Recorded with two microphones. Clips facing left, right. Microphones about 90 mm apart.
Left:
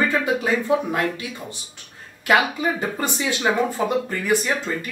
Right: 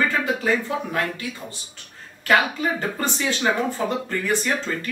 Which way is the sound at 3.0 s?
15° left (ahead or behind).